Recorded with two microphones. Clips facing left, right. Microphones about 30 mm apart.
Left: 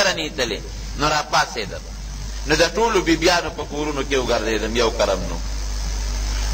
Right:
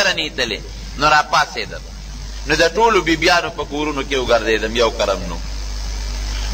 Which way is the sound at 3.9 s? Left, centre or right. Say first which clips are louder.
Right 3 dB; centre.